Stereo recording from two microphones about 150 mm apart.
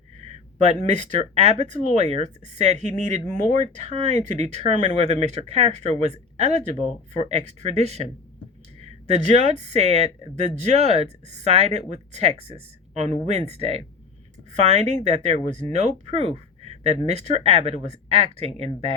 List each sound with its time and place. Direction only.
0.2 s speech: 45° right (ahead or behind)